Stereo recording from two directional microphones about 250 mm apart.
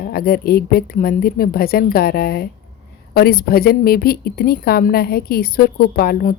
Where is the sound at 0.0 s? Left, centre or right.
Left.